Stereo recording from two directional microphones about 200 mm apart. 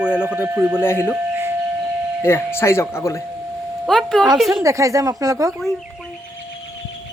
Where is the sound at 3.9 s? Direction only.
Centre (ahead or behind).